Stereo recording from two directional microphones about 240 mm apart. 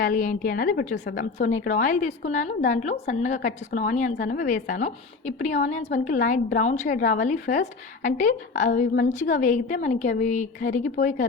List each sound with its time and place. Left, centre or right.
0.0 s a woman's voice: left
1.1 s a woman's voice: left